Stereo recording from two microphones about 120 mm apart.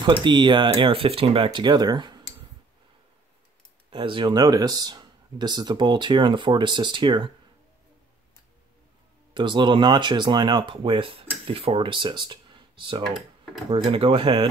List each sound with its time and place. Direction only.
0.0 s speech: 40° right (ahead or behind)
3.9 s speech: 45° right (ahead or behind)
9.3 s speech: 40° right (ahead or behind)